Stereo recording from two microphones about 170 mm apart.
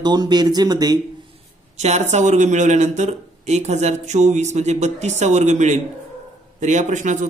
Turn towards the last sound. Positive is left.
turn(degrees=-45)  # may be behind; listen again after turning